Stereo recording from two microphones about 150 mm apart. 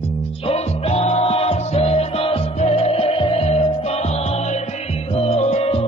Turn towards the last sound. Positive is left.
turn(degrees=45)  # may be behind; listen again after turning